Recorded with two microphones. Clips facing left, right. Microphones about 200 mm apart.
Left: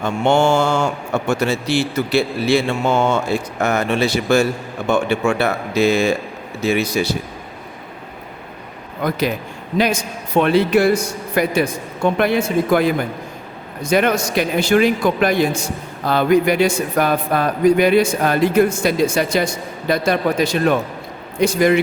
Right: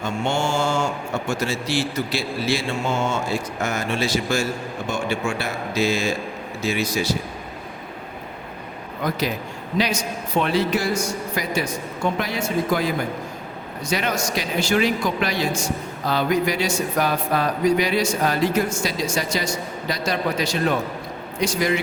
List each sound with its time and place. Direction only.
0.0 s a man's voice: 60° left (ahead or behind)
9.7 s a man's voice: 50° left (ahead or behind)